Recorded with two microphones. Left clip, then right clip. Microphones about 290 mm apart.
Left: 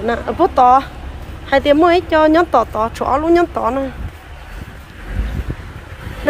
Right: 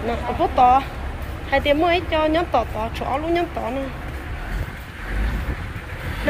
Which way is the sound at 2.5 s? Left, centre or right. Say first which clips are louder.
Left 7 dB; left.